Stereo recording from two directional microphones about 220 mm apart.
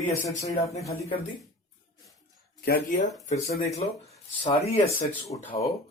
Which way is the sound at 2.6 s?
40° left (ahead or behind).